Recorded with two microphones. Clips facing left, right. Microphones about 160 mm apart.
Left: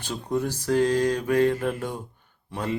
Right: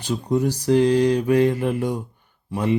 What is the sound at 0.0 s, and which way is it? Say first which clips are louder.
Speech: right 6 dB; 10° right (ahead or behind).